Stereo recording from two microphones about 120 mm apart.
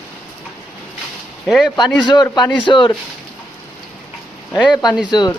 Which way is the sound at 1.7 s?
35° left (ahead or behind).